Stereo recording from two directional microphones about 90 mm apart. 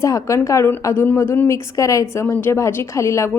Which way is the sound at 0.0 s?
35° left (ahead or behind).